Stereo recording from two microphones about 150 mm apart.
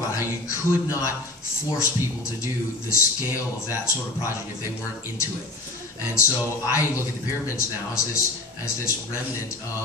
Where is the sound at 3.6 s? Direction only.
20° left (ahead or behind).